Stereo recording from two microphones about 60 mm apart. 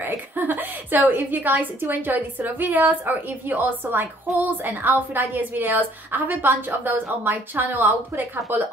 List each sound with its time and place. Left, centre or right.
0.0 s a woman's voice: right